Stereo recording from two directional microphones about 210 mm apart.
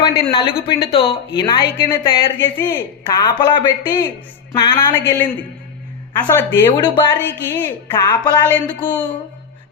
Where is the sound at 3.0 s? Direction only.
20° left (ahead or behind).